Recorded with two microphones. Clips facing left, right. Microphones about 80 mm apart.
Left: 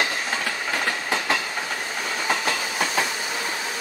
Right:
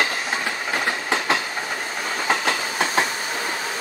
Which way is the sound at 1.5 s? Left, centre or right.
Centre.